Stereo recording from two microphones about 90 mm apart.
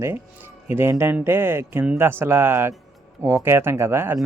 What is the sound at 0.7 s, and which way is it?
Speech, 25° right (ahead or behind).